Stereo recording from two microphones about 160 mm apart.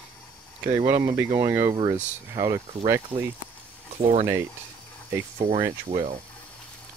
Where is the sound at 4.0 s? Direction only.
45° right (ahead or behind).